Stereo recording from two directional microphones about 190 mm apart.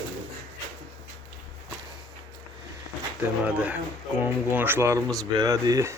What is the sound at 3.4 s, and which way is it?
Speech, 10° right (ahead or behind).